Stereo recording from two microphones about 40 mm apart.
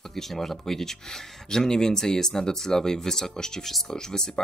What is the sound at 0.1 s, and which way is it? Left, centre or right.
Speech, centre.